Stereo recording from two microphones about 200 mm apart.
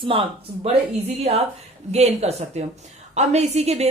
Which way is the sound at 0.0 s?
25° right (ahead or behind).